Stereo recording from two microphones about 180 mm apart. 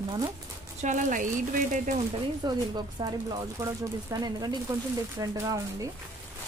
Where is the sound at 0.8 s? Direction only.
45° right (ahead or behind).